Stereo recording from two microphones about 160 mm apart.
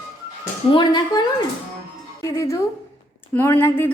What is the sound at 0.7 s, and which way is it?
Speech, 30° left (ahead or behind).